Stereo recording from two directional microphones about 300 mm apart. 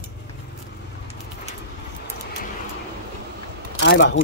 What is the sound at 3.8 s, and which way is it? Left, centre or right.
Speech, left.